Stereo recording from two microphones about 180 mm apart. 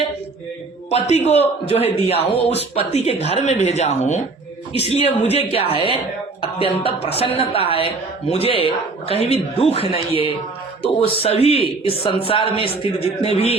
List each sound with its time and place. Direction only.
0.9 s speech: 35° left (ahead or behind)